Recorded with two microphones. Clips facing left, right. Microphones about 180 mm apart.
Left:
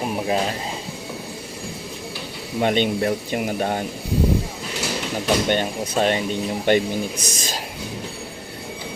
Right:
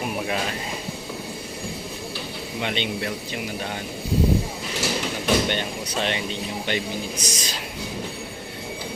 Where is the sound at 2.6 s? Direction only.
45° left (ahead or behind).